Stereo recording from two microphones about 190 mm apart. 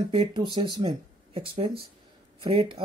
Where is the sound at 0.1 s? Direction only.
25° right (ahead or behind).